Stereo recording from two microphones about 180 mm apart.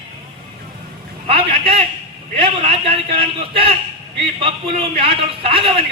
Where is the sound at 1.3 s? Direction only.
30° right (ahead or behind).